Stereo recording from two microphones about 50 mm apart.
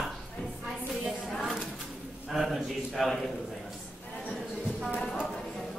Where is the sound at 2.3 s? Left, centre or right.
Centre.